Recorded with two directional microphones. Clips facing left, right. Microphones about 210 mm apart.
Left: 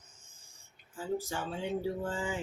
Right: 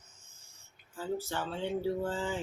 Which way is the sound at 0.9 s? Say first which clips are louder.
Even; 15° left (ahead or behind).